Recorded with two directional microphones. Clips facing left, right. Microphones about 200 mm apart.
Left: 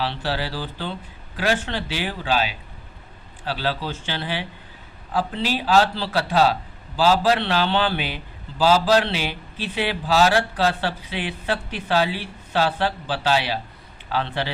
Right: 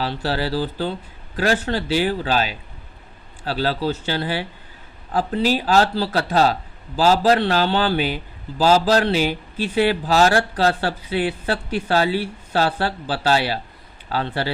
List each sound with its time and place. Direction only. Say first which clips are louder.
0.0 s speech: right 3 dB; 40° right (ahead or behind)